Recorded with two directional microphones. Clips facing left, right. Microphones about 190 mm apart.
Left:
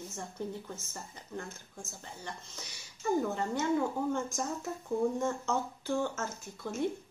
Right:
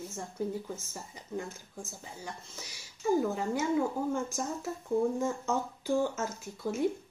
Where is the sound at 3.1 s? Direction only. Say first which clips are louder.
Right 2 dB; 5° right (ahead or behind).